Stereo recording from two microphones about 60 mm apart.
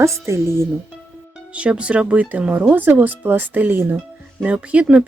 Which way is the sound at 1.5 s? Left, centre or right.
Centre.